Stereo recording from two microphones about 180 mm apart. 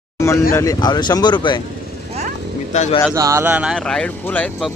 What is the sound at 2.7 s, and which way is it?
Speech, 40° left (ahead or behind).